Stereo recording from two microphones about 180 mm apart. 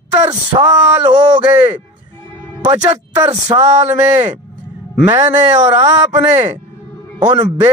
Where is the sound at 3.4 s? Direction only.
40° right (ahead or behind).